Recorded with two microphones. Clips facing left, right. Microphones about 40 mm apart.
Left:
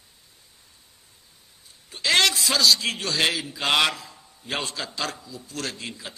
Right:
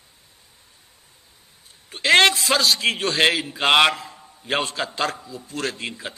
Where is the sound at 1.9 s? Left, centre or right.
Right.